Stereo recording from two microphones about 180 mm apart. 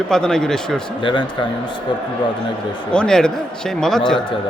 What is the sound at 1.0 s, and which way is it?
Speech, 25° left (ahead or behind).